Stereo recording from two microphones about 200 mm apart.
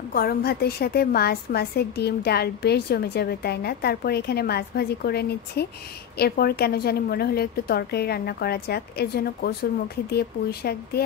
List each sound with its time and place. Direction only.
0.1 s a woman's voice: 50° left (ahead or behind)